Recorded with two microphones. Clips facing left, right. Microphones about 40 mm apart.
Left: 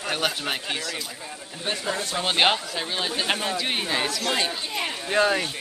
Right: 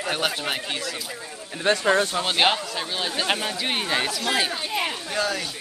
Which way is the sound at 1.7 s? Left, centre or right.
Right.